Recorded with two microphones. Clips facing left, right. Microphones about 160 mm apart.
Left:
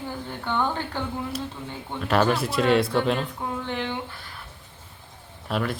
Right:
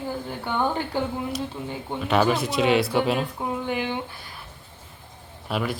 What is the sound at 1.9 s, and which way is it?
Speech, 5° right (ahead or behind).